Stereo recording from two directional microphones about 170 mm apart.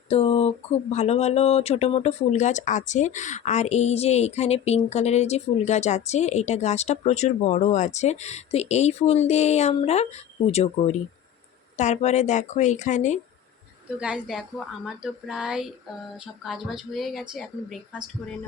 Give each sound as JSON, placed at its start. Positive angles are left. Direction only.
{"t": 0.1, "sound": "a woman's voice", "side_deg": 35}
{"t": 14.0, "sound": "speech", "side_deg": -5}